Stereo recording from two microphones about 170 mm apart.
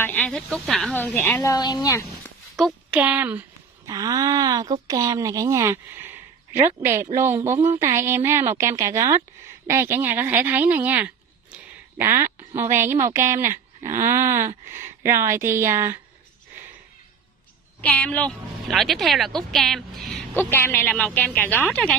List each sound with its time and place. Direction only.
0.0 s speech: 5° left (ahead or behind)
2.5 s a sound: centre (ahead or behind)
3.0 s speech: 10° right (ahead or behind)
17.8 s a woman's voice: 10° left (ahead or behind)
20.3 s speech: 10° left (ahead or behind)